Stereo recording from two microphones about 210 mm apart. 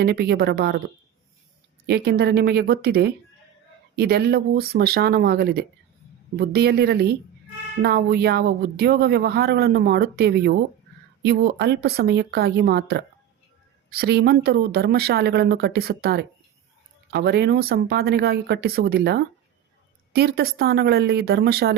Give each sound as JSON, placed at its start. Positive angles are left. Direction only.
{"t": 0.0, "sound": "speech", "side_deg": -50}
{"t": 1.9, "sound": "speech", "side_deg": -50}